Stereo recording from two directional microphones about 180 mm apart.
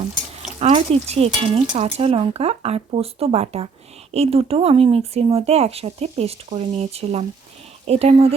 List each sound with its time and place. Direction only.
0.6 s speech: 35° right (ahead or behind)